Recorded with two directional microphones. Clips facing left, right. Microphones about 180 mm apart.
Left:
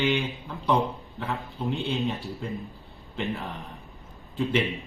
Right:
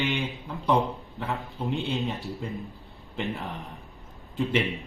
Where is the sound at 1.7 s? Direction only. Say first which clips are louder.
Right 1 dB; 20° right (ahead or behind).